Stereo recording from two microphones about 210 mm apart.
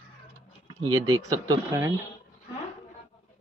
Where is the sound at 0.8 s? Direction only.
20° right (ahead or behind).